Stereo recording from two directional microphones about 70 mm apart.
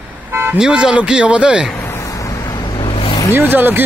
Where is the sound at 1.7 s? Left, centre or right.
Left.